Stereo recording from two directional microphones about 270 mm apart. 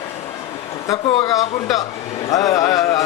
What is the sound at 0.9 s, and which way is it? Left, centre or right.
Speech, centre.